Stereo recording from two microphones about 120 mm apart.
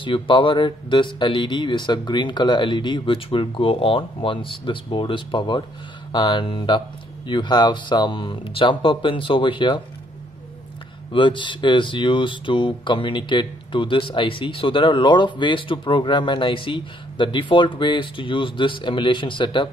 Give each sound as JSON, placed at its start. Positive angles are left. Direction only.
{"t": 0.0, "sound": "speech", "side_deg": 45}
{"t": 11.1, "sound": "speech", "side_deg": 45}